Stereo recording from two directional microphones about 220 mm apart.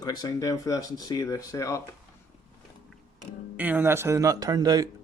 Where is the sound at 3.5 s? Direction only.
5° right (ahead or behind).